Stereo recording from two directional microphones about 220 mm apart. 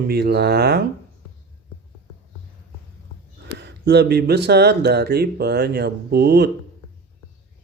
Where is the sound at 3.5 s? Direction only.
50° right (ahead or behind).